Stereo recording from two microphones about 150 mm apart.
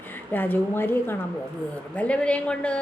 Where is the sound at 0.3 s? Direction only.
10° left (ahead or behind).